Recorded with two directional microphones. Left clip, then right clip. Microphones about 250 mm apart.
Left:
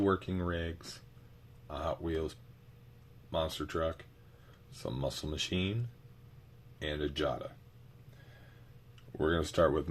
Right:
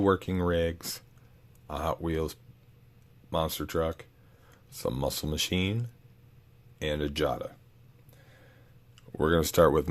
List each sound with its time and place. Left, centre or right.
0.0 s speech: right
6.7 s speech: right
9.1 s speech: right